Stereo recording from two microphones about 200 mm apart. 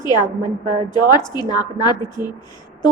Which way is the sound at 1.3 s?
20° left (ahead or behind).